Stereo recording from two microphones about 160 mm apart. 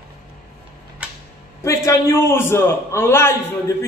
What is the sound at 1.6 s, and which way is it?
A man's voice, 20° left (ahead or behind).